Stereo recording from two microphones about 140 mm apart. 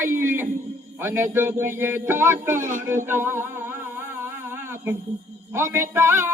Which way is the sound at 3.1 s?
15° right (ahead or behind).